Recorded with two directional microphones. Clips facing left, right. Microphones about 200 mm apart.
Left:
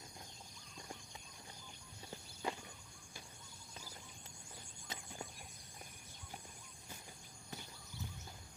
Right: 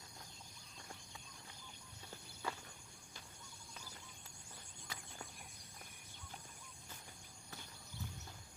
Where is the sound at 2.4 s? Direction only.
20° left (ahead or behind).